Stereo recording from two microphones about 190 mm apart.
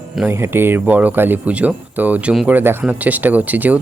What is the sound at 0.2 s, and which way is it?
Speech, 10° right (ahead or behind).